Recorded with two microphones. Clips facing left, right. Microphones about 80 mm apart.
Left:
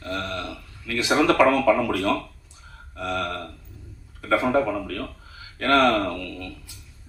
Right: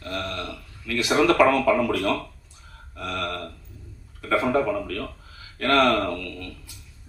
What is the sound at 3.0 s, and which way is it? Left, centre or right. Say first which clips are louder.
Speech: left 2 dB; left.